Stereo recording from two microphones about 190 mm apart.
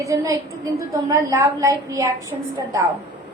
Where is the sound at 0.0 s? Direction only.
15° right (ahead or behind).